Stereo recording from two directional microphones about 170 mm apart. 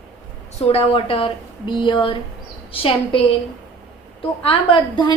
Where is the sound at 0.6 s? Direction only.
35° left (ahead or behind).